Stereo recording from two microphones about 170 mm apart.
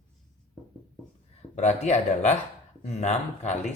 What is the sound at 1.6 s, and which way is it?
Speech, 40° left (ahead or behind).